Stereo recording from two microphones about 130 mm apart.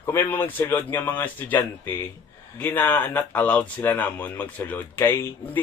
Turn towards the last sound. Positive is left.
turn(degrees=15)  # may be behind; listen again after turning